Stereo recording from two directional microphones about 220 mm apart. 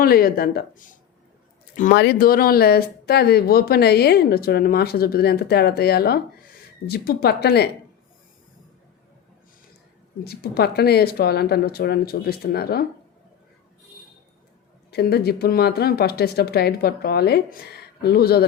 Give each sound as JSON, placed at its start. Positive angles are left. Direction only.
{"t": 0.0, "sound": "speech", "side_deg": 40}
{"t": 10.2, "sound": "speech", "side_deg": 45}
{"t": 14.8, "sound": "speech", "side_deg": 45}